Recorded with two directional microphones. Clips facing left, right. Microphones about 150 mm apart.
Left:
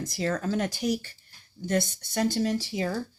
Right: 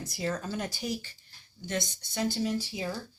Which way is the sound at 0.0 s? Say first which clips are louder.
Left 5 dB; 90° left.